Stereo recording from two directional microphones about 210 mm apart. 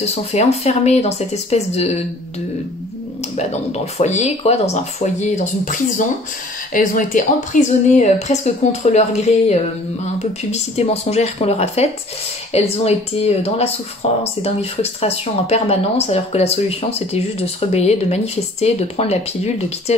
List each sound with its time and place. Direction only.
0.0 s speech: 30° left (ahead or behind)
3.3 s speech: 30° left (ahead or behind)